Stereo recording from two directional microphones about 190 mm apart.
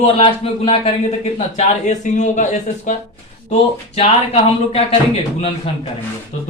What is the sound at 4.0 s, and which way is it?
Speech, 30° left (ahead or behind).